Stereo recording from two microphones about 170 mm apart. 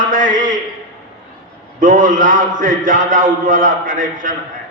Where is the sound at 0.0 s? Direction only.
50° right (ahead or behind).